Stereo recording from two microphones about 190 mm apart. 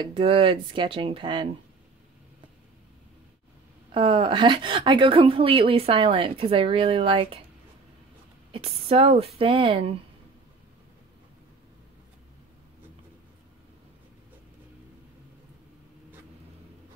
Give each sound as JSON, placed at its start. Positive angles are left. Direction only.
{"t": 0.0, "sound": "a woman's voice", "side_deg": -30}
{"t": 3.9, "sound": "a woman's voice", "side_deg": -30}
{"t": 8.5, "sound": "a woman's voice", "side_deg": -30}